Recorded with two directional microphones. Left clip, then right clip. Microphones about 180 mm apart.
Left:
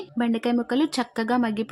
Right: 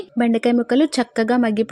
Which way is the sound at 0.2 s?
20° right (ahead or behind).